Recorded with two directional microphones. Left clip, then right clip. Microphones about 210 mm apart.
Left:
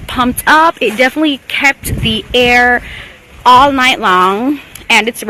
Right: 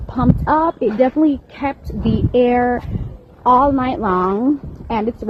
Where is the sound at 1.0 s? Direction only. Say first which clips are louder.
Left 2 dB; 5° left (ahead or behind).